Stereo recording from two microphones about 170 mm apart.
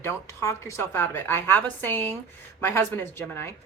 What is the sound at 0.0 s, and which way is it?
A woman's voice, 15° left (ahead or behind).